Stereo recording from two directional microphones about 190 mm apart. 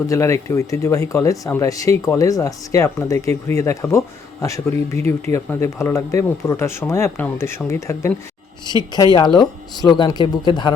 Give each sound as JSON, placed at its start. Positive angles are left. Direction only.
{"t": 0.1, "sound": "speech", "side_deg": 15}
{"t": 9.1, "sound": "speech", "side_deg": 20}